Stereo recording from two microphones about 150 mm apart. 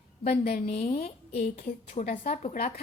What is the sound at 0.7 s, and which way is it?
A woman's voice, 45° left (ahead or behind).